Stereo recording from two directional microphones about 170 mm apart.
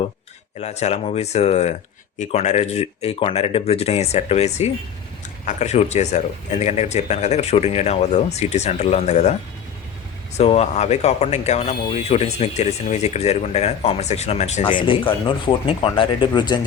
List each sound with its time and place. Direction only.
0.6 s speech: 40° left (ahead or behind)
10.3 s speech: 40° left (ahead or behind)
14.6 s speech: 30° left (ahead or behind)